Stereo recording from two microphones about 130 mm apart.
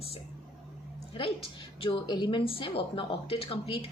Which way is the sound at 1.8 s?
35° left (ahead or behind).